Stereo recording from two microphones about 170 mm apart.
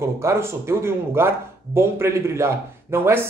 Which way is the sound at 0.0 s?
15° right (ahead or behind).